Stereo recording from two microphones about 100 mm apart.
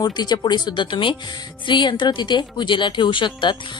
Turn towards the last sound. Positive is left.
turn(degrees=55)  # may be behind; listen again after turning